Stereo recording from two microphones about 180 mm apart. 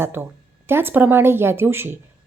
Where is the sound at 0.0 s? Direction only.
15° right (ahead or behind).